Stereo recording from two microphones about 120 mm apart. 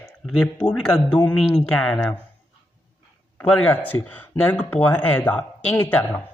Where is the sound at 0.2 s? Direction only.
5° left (ahead or behind).